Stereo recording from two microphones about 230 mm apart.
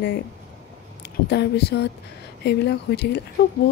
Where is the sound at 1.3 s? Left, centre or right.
Left.